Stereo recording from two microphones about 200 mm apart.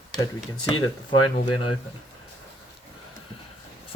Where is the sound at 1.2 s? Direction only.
90° left.